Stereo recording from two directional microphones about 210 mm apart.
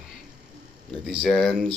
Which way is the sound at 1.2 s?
5° left (ahead or behind).